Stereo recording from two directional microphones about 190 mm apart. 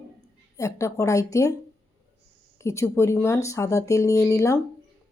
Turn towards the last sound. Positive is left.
turn(degrees=15)  # may be behind; listen again after turning